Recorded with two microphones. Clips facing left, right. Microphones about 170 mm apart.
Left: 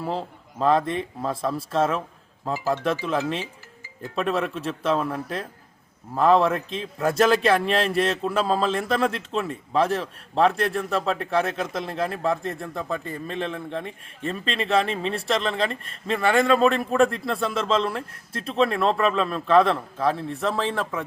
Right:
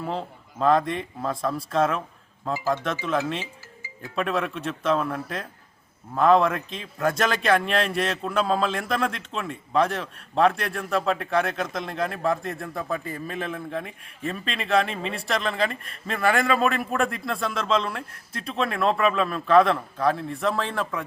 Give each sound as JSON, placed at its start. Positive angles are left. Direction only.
{"t": 0.0, "sound": "a man's voice", "side_deg": 0}
{"t": 2.4, "sound": "speech", "side_deg": 15}
{"t": 3.0, "sound": "a man's voice", "side_deg": 0}
{"t": 4.8, "sound": "speech", "side_deg": 30}
{"t": 6.1, "sound": "a man's voice", "side_deg": 0}